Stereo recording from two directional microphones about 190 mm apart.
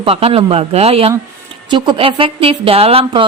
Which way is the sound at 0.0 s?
30° right (ahead or behind).